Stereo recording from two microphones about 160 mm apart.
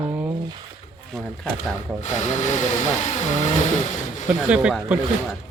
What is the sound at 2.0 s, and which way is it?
Vehicle, 50° left (ahead or behind).